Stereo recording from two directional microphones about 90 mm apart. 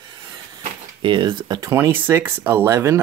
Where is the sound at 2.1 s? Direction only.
25° right (ahead or behind).